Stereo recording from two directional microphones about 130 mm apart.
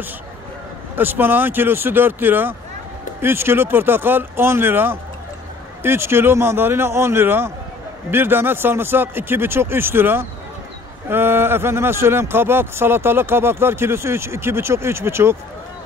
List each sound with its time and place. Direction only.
0.9 s a man's voice: 15° right (ahead or behind)